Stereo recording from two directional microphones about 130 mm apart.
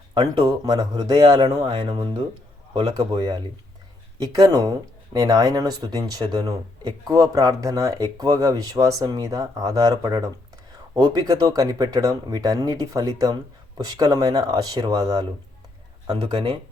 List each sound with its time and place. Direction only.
0.1 s speech: 30° right (ahead or behind)
1.7 s speech: 45° right (ahead or behind)
4.4 s speech: 30° right (ahead or behind)